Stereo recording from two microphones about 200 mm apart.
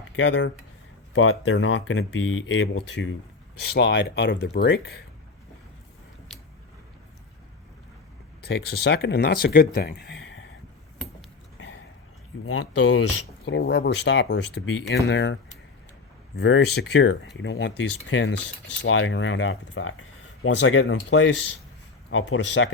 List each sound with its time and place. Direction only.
0.2 s speech: 70° left (ahead or behind)
8.4 s speech: 55° left (ahead or behind)
12.5 s speech: 75° left (ahead or behind)